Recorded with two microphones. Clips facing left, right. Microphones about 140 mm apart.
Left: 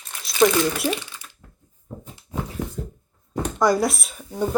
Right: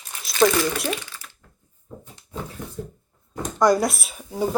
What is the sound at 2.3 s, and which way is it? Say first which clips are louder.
Dog: left 3 dB; 90° left.